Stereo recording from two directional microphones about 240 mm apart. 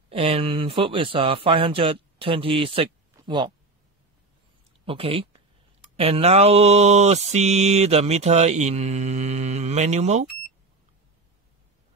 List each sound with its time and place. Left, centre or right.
0.1 s speech: right
4.8 s speech: right
5.9 s mantra: right